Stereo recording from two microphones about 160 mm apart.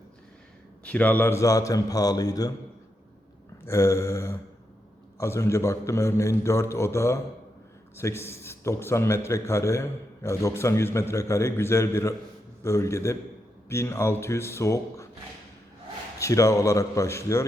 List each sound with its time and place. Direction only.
0.9 s a man's voice: 10° left (ahead or behind)
3.7 s a man's voice: 15° left (ahead or behind)
16.1 s a man's voice: 20° left (ahead or behind)